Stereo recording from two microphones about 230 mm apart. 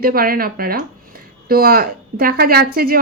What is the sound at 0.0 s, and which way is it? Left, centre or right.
A woman's voice, right.